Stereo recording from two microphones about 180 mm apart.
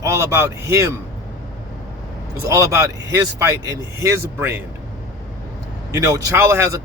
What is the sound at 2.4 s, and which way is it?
Speech, 15° right (ahead or behind).